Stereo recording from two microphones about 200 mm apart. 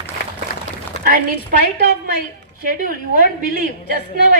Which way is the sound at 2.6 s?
45° right (ahead or behind).